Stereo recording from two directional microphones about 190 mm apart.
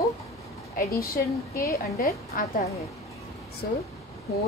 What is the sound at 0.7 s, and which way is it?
A woman's voice, 50° left (ahead or behind).